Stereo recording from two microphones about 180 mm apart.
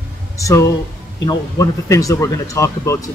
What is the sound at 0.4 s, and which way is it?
Speech, 15° left (ahead or behind).